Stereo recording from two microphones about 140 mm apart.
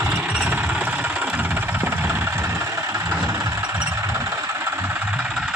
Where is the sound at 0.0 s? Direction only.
15° right (ahead or behind).